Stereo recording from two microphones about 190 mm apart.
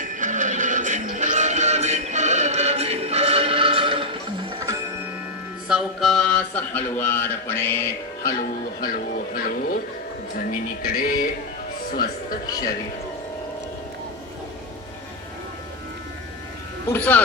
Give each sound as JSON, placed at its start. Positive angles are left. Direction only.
{"t": 0.2, "sound": "music", "side_deg": -40}
{"t": 5.6, "sound": "mantra", "side_deg": 0}
{"t": 8.9, "sound": "speech", "side_deg": 50}
{"t": 16.9, "sound": "mantra", "side_deg": 10}